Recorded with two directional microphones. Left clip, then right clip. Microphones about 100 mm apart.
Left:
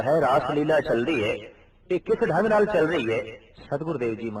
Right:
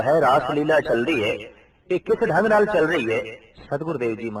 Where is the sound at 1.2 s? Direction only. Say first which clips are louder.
Right 3 dB; 50° right (ahead or behind).